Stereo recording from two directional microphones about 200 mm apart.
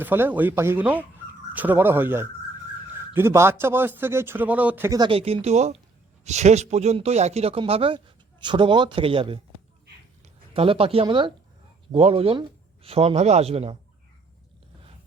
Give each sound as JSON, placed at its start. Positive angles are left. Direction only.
{"t": 0.0, "sound": "speech", "side_deg": -10}